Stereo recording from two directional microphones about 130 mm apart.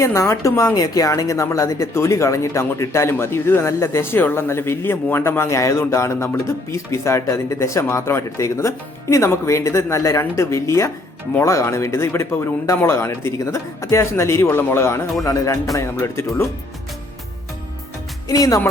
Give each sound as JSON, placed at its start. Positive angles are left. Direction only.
{"t": 0.0, "sound": "speech", "side_deg": 25}
{"t": 18.3, "sound": "speech", "side_deg": 25}